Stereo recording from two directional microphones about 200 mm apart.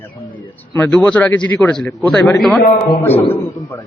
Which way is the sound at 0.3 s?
10° left (ahead or behind).